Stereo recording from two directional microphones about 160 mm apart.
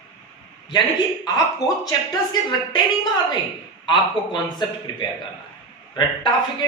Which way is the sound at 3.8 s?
30° left (ahead or behind).